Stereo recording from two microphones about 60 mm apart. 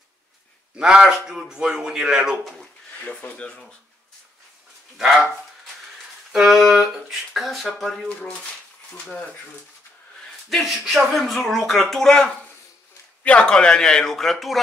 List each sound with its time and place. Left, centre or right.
0.7 s a man's voice: centre
3.0 s speech: left
4.9 s speech: centre
6.3 s speech: centre
8.2 s speech: centre
10.5 s speech: centre